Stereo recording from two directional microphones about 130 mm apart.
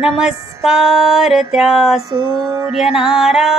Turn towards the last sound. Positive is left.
turn(degrees=0)  # may be behind; listen again after turning